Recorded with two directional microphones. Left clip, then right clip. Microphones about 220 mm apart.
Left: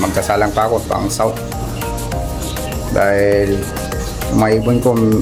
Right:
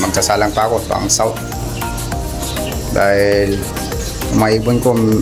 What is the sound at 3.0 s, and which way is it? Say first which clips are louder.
Speech: even; centre (ahead or behind).